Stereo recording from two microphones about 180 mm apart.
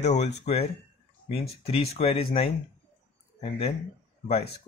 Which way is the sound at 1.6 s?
35° left (ahead or behind).